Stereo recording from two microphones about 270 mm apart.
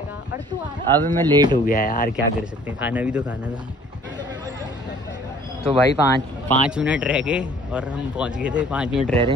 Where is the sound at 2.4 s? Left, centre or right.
Centre.